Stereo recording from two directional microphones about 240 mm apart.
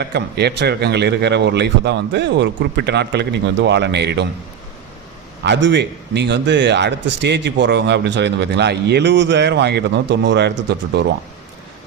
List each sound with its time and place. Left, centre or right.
0.0 s a man's voice: right
5.4 s a man's voice: right